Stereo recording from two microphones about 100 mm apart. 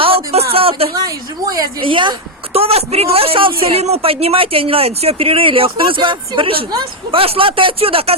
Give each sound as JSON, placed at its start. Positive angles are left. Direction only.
{"t": 0.0, "sound": "a sound", "side_deg": -75}
{"t": 0.9, "sound": "a woman's voice", "side_deg": -35}
{"t": 1.8, "sound": "speech", "side_deg": -55}
{"t": 2.5, "sound": "a man's voice", "side_deg": -80}